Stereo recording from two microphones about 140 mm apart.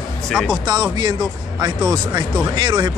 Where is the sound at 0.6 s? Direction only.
30° right (ahead or behind).